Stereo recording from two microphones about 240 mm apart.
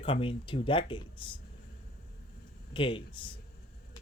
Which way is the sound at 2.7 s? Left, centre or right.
Left.